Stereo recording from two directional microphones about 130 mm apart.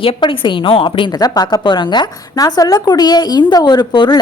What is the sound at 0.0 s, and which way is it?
A woman's voice, 45° left (ahead or behind).